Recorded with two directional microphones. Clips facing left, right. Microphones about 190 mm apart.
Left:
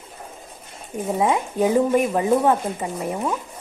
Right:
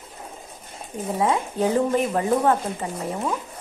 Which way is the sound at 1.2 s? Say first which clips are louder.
Left 2 dB; 15° left (ahead or behind).